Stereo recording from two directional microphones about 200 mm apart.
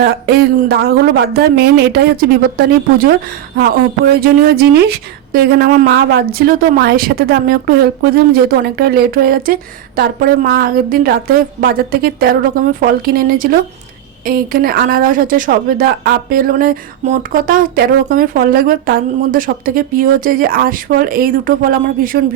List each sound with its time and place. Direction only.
0.0 s a woman's voice: 50° right (ahead or behind)